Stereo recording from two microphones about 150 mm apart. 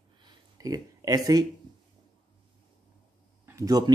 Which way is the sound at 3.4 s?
20° right (ahead or behind).